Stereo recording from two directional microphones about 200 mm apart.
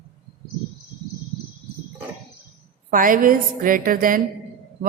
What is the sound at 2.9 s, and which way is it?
A woman's voice, 45° right (ahead or behind).